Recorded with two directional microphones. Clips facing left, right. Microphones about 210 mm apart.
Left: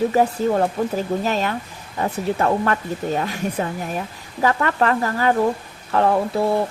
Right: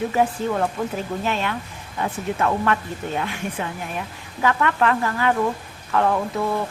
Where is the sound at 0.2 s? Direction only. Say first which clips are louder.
Left 1 dB; 35° left (ahead or behind).